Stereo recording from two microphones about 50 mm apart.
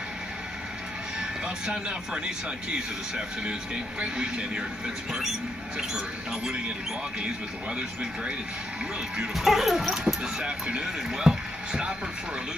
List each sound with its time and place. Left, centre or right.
1.7 s speech: centre
9.3 s speech: centre
10.4 s speech: centre